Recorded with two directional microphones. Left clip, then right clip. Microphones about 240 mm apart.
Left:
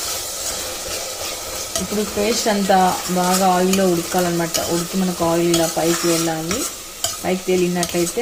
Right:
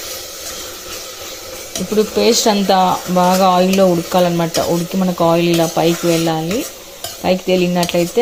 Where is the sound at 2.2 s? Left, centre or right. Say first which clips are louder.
Right 3 dB; right.